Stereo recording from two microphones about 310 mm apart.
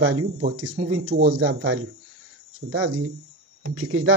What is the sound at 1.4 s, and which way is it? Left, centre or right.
Speech, right.